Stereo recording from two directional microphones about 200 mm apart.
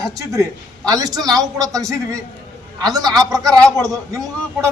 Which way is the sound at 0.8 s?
15° right (ahead or behind).